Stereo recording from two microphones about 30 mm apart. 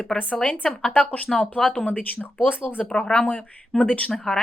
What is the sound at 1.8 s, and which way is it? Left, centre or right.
Speech, left.